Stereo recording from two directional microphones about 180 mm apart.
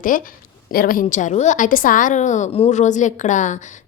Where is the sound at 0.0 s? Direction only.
50° left (ahead or behind).